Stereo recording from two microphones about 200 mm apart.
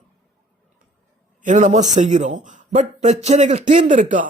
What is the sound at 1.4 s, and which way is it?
A man's voice, 40° right (ahead or behind).